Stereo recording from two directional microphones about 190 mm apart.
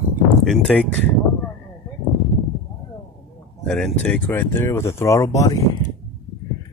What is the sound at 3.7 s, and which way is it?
Speech, 5° left (ahead or behind).